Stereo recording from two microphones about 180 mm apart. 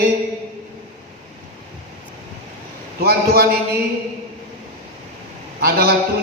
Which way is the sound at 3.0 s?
60° right (ahead or behind).